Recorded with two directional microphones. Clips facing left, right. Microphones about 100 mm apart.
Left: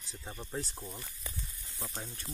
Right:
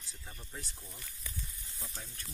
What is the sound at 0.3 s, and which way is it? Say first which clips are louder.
Speech: left 8 dB; 60° left (ahead or behind).